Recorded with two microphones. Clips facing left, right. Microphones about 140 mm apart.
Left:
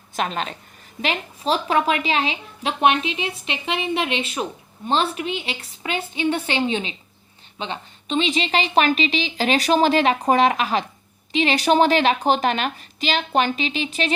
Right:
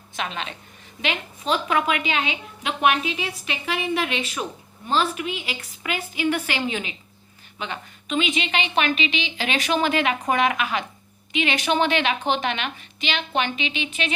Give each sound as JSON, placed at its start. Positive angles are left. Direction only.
{"t": 0.2, "sound": "a woman's voice", "side_deg": 40}